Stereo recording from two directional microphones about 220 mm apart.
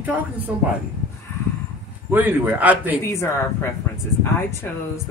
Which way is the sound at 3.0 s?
10° left (ahead or behind).